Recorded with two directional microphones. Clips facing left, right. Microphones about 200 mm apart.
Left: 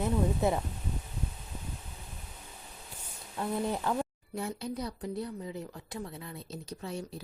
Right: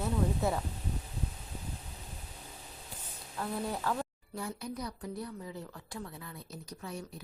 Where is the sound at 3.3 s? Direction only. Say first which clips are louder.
Left 4 dB; 20° left (ahead or behind).